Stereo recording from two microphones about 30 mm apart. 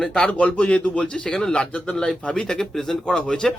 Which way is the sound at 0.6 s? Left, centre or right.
Left.